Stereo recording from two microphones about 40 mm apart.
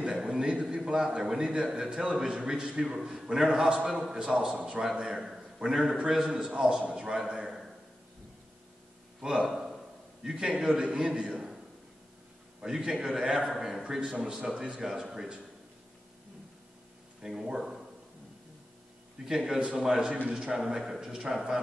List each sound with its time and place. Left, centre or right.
0.0 s a sound: centre
0.5 s a man's voice: right
4.8 s a man's voice: centre
10.2 s a man's voice: centre
10.7 s a man's voice: right
11.0 s a man's voice: centre
12.6 s a man's voice: centre
13.5 s a man's voice: centre; by 14.8 s right
14.8 s a man's voice: centre
17.2 s a man's voice: centre
19.2 s a man's voice: centre
20.1 s a man's voice: right
20.3 s a man's voice: centre